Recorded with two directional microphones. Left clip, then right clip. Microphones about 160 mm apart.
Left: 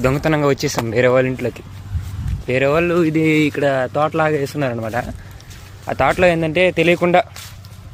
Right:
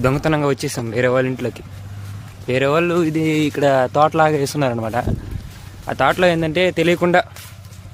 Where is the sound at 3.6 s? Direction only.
20° right (ahead or behind).